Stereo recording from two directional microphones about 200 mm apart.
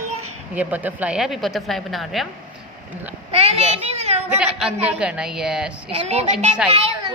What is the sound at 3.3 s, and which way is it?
Speech, 30° right (ahead or behind).